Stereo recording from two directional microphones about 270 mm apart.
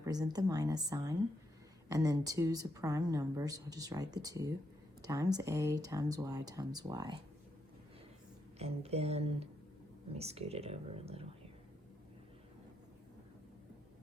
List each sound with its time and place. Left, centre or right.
0.0 s speech: centre
8.5 s speech: right